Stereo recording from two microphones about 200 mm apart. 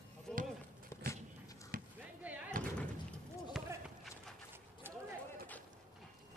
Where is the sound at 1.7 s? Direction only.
45° right (ahead or behind).